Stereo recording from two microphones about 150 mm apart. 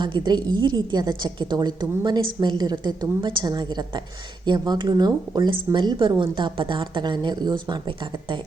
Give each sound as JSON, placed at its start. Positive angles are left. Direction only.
{"t": 0.0, "sound": "a woman's voice", "side_deg": -30}